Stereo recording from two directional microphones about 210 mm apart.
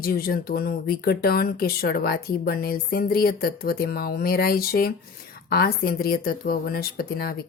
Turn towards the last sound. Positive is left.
turn(degrees=45)  # may be behind; listen again after turning